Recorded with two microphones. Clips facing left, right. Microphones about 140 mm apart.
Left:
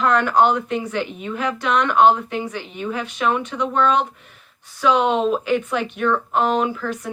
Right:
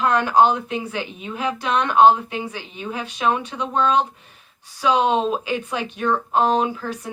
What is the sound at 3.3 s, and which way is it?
Speech, 30° right (ahead or behind).